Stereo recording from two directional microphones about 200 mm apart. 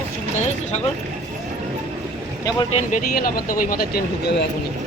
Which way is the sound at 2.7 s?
45° left (ahead or behind).